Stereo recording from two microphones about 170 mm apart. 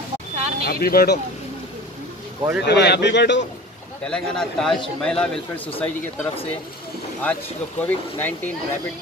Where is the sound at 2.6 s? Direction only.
80° left.